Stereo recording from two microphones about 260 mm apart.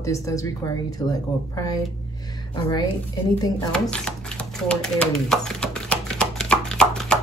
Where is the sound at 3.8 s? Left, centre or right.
Centre.